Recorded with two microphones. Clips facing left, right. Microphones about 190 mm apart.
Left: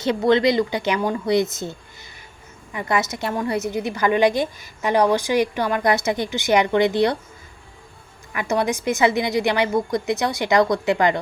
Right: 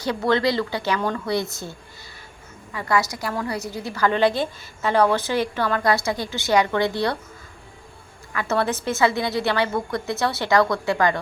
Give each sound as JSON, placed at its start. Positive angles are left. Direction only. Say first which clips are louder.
{"t": 0.0, "sound": "a woman's voice", "louder": "left 4 dB", "side_deg": 20}
{"t": 2.7, "sound": "a woman's voice", "louder": "even", "side_deg": 20}
{"t": 8.3, "sound": "a woman's voice", "louder": "left 1 dB", "side_deg": 15}